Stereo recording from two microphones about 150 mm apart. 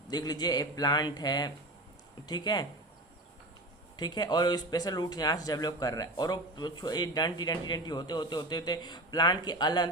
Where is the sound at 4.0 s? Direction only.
30° left (ahead or behind).